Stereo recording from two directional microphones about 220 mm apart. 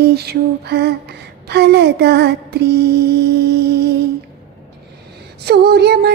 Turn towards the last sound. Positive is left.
turn(degrees=-45)  # may be behind; listen again after turning